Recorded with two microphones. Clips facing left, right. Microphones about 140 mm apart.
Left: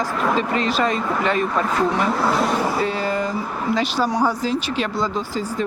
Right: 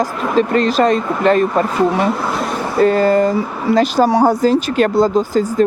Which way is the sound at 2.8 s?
45° right (ahead or behind).